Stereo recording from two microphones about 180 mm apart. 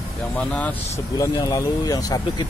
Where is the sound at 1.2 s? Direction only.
20° left (ahead or behind).